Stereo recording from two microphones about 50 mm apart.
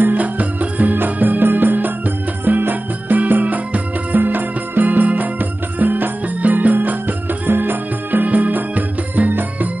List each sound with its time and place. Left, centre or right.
0.0 s music: right